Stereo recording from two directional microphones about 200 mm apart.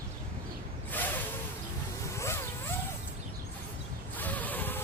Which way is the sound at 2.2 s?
15° left (ahead or behind).